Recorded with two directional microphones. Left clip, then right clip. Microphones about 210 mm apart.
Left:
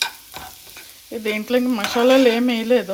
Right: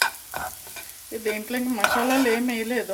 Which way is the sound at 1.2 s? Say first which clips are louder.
Left 7 dB; 25° left (ahead or behind).